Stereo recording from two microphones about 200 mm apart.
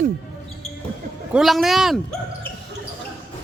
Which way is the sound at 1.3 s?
Centre (ahead or behind).